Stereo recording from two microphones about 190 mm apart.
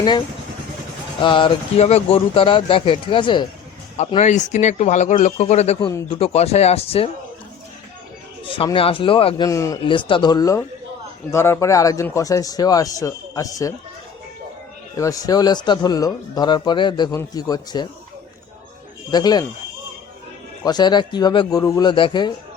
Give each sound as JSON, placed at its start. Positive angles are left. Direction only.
{"t": 1.2, "sound": "speech", "side_deg": 25}
{"t": 3.9, "sound": "speech", "side_deg": 35}
{"t": 8.4, "sound": "speech", "side_deg": 25}
{"t": 9.5, "sound": "speech", "side_deg": 15}
{"t": 14.9, "sound": "speech", "side_deg": 15}
{"t": 19.1, "sound": "speech", "side_deg": 20}
{"t": 20.7, "sound": "speech", "side_deg": 20}